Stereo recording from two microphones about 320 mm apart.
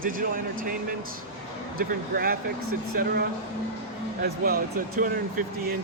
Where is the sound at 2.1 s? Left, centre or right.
Right.